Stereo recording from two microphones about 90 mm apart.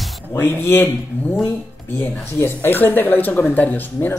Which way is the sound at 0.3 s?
25° left (ahead or behind).